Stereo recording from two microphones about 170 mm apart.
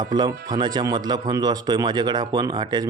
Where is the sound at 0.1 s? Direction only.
25° right (ahead or behind).